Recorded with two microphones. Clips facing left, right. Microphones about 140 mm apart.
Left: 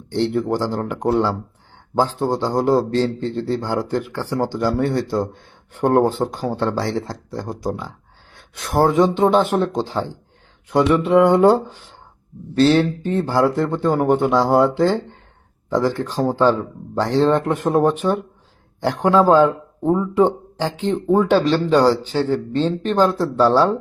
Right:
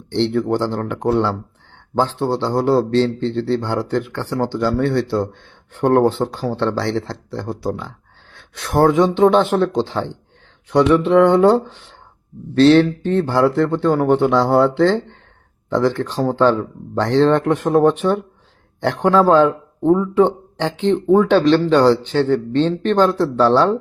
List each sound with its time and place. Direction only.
0.1 s a man's voice: 10° left (ahead or behind)
5.8 s a man's voice: 10° left (ahead or behind)
16.0 s a man's voice: 10° left (ahead or behind)